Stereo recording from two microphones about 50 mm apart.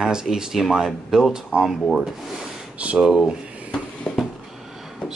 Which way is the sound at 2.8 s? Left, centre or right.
Right.